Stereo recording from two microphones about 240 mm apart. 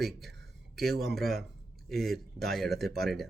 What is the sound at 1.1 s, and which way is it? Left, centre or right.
Speech, centre.